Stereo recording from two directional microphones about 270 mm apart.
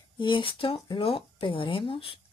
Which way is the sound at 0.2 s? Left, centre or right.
Centre.